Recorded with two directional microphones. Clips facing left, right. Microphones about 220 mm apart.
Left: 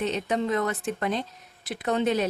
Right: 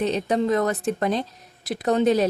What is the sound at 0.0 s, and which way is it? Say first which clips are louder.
Speech: right 4 dB; 35° right (ahead or behind).